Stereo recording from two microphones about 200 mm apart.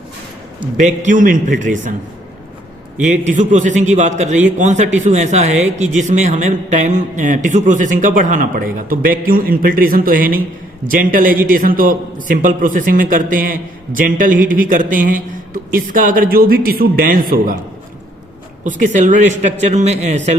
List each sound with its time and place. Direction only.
0.8 s a man's voice: 40° right (ahead or behind)
3.0 s a man's voice: 40° right (ahead or behind)
18.6 s a man's voice: 40° right (ahead or behind)